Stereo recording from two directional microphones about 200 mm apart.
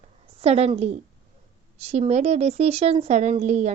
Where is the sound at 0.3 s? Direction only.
30° right (ahead or behind).